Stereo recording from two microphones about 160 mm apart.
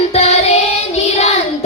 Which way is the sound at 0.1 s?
40° left (ahead or behind).